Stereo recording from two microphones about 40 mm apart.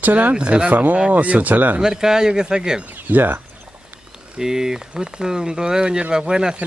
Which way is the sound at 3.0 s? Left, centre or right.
Right.